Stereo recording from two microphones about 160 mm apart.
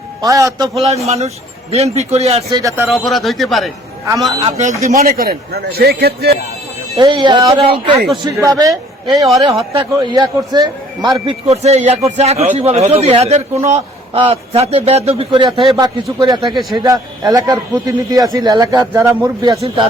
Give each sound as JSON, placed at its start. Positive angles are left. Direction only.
{"t": 0.2, "sound": "a man's voice", "side_deg": -20}
{"t": 1.0, "sound": "a man's voice", "side_deg": -40}
{"t": 2.5, "sound": "a man's voice", "side_deg": -20}
{"t": 2.8, "sound": "speech", "side_deg": 0}
{"t": 4.4, "sound": "speech", "side_deg": -45}
{"t": 4.7, "sound": "a man's voice", "side_deg": -20}
{"t": 5.0, "sound": "a man's voice", "side_deg": -70}
{"t": 6.9, "sound": "a man's voice", "side_deg": -30}
{"t": 9.0, "sound": "speech", "side_deg": 0}
{"t": 9.9, "sound": "a man's voice", "side_deg": -30}
{"t": 11.3, "sound": "a man's voice", "side_deg": -40}